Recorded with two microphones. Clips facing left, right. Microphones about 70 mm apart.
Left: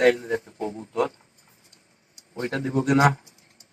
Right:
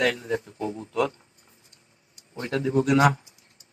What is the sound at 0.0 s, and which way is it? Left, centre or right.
Speech, left.